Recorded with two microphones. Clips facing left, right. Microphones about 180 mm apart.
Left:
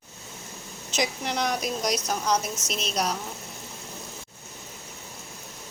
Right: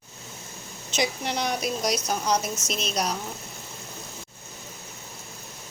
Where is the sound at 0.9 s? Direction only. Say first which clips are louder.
Right 1 dB; centre (ahead or behind).